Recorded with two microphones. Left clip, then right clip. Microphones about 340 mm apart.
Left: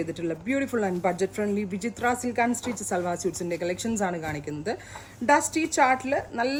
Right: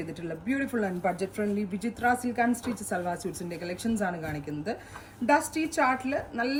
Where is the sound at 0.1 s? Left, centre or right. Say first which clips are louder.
Left 5 dB; left.